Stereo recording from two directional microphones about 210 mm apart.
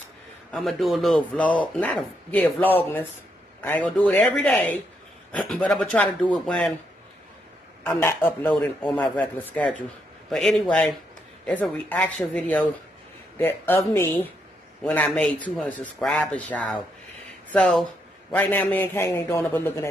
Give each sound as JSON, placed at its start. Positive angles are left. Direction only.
{"t": 0.5, "sound": "a man's voice", "side_deg": 0}
{"t": 7.8, "sound": "a man's voice", "side_deg": 10}